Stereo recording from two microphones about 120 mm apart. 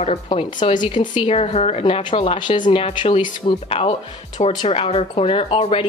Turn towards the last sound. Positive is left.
turn(degrees=55)  # may be behind; listen again after turning